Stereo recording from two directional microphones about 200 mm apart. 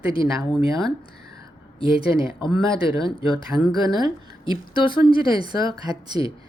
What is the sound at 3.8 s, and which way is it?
A woman's voice, 20° right (ahead or behind).